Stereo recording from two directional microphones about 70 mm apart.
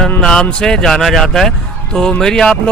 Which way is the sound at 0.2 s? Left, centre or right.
Centre.